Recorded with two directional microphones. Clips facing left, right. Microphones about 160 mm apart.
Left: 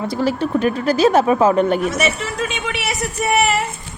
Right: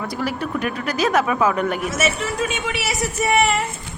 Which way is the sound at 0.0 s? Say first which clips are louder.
Left 5 dB; 30° left (ahead or behind).